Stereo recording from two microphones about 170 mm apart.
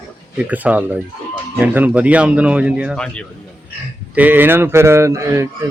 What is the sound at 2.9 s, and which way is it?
Speech, 5° left (ahead or behind).